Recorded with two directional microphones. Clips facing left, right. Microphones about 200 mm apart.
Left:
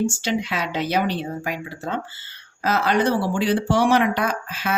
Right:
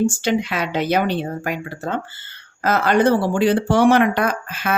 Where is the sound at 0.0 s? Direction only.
55° right (ahead or behind).